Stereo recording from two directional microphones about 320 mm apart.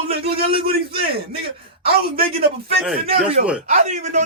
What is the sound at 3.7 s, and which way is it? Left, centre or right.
Speech, right.